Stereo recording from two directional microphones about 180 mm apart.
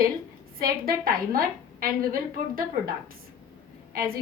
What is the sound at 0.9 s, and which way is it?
A woman's voice, 55° right (ahead or behind).